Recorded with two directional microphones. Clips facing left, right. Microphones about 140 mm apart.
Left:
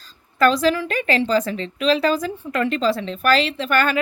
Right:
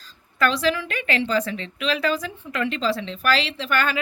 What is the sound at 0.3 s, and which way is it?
A woman's voice, 40° left (ahead or behind).